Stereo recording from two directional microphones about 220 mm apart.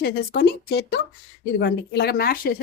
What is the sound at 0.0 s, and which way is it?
Speech, 45° left (ahead or behind).